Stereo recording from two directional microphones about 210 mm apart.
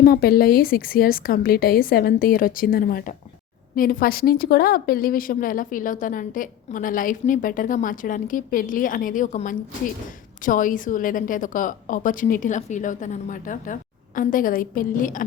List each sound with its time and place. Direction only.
0.0 s a woman's voice: 45° left (ahead or behind)